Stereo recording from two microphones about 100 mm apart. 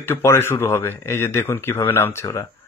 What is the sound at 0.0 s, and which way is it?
A man's voice, 25° left (ahead or behind).